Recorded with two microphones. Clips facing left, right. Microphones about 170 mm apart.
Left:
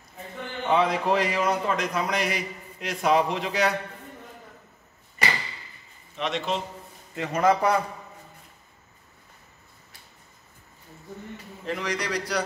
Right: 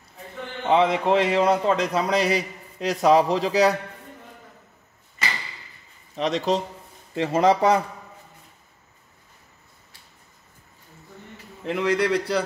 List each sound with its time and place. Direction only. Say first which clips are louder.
0.7 s a man's voice: right 3 dB; 20° right (ahead or behind)
6.1 s a man's voice: right 5 dB; 40° right (ahead or behind)
7.2 s a man's voice: right 3 dB; 25° right (ahead or behind)
11.6 s a man's voice: right 7 dB; 25° right (ahead or behind)